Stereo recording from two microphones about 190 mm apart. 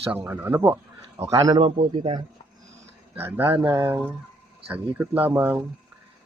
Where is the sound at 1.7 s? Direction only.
35° right (ahead or behind).